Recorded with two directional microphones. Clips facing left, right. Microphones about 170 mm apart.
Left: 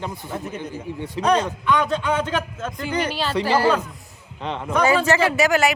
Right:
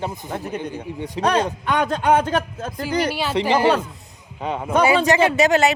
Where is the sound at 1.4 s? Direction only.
45° right (ahead or behind).